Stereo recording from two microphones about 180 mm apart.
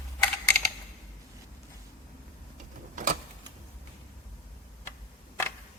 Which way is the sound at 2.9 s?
45° right (ahead or behind).